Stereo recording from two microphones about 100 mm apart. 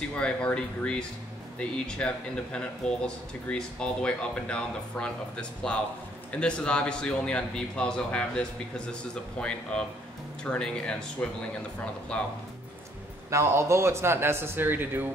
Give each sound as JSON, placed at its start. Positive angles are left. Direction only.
{"t": 0.2, "sound": "speech", "side_deg": 10}
{"t": 12.1, "sound": "speech", "side_deg": 10}
{"t": 13.3, "sound": "speech", "side_deg": -30}